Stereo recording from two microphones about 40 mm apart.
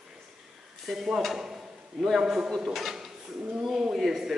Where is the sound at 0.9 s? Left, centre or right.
Centre.